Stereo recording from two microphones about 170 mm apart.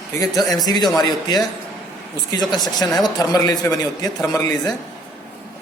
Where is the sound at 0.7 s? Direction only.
20° left (ahead or behind).